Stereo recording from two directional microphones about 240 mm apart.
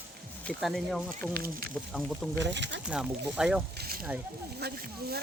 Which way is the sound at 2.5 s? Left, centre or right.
Right.